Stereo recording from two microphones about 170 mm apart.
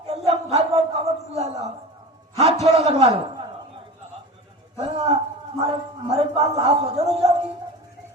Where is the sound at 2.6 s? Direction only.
40° right (ahead or behind).